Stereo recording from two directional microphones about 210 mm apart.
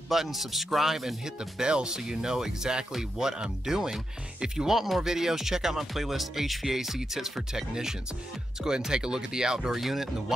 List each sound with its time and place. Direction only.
0.1 s speech: centre (ahead or behind)